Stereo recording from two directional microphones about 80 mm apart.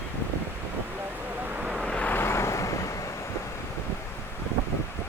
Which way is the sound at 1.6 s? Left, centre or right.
Centre.